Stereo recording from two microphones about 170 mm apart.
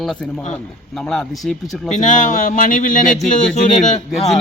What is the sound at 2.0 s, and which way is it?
Speech, 50° left (ahead or behind).